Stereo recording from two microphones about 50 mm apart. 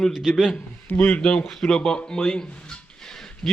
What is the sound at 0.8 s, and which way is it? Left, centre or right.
Speech, left.